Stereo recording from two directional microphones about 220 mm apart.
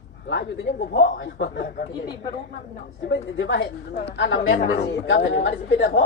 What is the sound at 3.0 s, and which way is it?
Speech, 50° left (ahead or behind).